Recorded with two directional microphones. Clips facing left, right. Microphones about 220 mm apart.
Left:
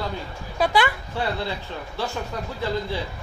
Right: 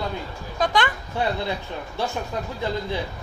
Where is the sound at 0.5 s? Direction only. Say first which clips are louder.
Left 1 dB; 10° left (ahead or behind).